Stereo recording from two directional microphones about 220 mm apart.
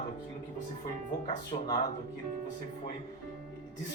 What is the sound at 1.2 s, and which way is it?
Speech, 20° left (ahead or behind).